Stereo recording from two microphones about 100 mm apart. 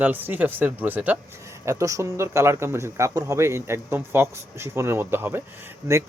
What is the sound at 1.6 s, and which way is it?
Speech, 30° right (ahead or behind).